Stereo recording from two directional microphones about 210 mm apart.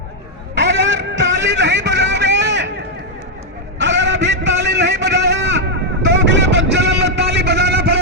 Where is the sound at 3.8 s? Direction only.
55° right (ahead or behind).